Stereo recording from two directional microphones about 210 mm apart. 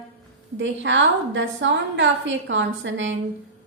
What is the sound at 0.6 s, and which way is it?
A woman's voice, 60° right (ahead or behind).